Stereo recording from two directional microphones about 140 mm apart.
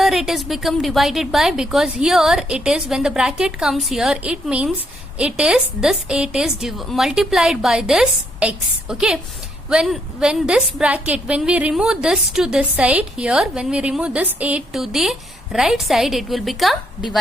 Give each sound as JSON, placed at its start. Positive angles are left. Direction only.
{"t": 0.0, "sound": "a woman's voice", "side_deg": 0}